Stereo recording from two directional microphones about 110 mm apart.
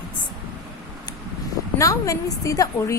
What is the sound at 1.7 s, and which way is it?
A woman's voice, 30° left (ahead or behind).